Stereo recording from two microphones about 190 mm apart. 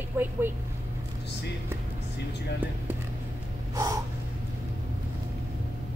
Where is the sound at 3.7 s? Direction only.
20° right (ahead or behind).